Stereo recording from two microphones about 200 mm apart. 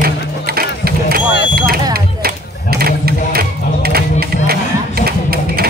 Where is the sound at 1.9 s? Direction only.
50° right (ahead or behind).